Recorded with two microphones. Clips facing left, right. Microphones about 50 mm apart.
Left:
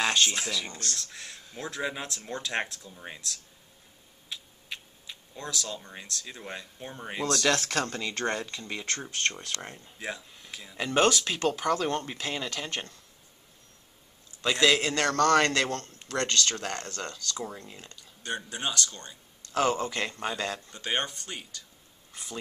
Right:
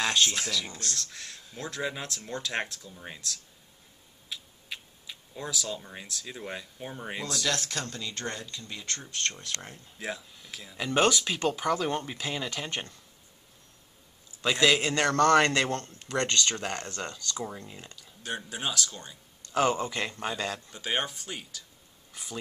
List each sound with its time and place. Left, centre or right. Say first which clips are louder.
0.0 s speech: left 1 dB; centre
0.7 s speech: even; centre
7.4 s speech: left 5 dB; left
8.5 s speech: left 4 dB; left
9.4 s speech: left 1 dB; centre
9.9 s speech: right 1 dB; centre
14.4 s a man's voice: even; centre
18.0 s a man's voice: left 1 dB; centre
22.1 s a sound: even; centre